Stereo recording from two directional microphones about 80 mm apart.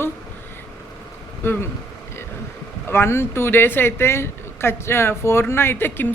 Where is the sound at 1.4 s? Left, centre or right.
Left.